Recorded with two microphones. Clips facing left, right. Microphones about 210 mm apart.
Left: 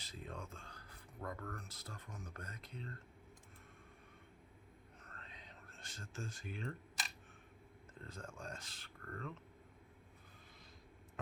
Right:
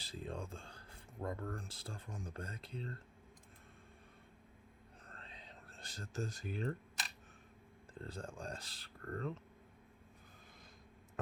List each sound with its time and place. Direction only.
0.0 s speech: 30° right (ahead or behind)
5.0 s whispering: 30° right (ahead or behind)
7.9 s speech: 35° right (ahead or behind)